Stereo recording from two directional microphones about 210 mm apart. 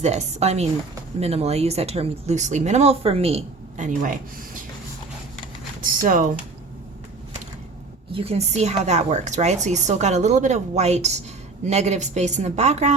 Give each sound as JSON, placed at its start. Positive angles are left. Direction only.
{"t": 0.0, "sound": "speech", "side_deg": -30}
{"t": 5.8, "sound": "speech", "side_deg": -40}
{"t": 8.1, "sound": "speech", "side_deg": -30}